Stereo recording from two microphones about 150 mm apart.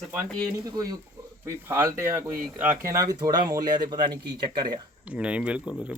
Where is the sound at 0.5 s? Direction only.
25° right (ahead or behind).